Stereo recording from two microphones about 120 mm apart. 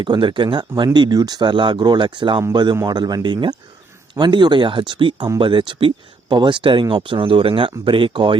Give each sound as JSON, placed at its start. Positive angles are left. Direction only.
{"t": 0.0, "sound": "speech", "side_deg": -40}